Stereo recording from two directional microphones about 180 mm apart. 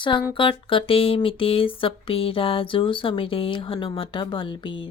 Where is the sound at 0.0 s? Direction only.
25° left (ahead or behind).